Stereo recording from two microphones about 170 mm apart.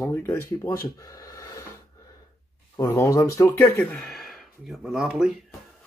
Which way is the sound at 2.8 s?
20° left (ahead or behind).